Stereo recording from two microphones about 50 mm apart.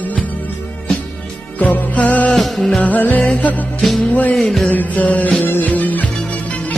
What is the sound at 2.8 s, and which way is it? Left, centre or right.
Music, left.